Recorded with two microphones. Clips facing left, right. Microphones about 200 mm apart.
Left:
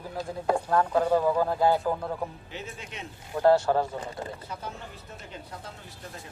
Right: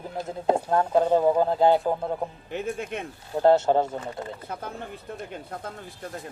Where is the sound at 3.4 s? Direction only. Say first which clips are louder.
Right 2 dB; 25° right (ahead or behind).